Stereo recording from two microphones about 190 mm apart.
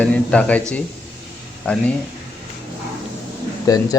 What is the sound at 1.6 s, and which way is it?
Speech, 5° left (ahead or behind).